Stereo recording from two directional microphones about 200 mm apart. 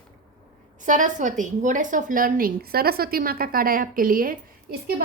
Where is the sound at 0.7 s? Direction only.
40° right (ahead or behind).